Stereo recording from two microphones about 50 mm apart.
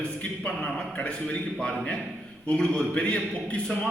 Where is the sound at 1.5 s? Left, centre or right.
Centre.